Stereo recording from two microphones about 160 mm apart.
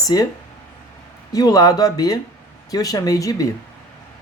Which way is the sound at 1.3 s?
25° left (ahead or behind).